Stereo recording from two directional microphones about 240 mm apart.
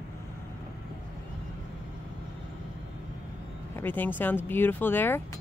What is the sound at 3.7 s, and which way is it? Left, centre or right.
Speech, centre.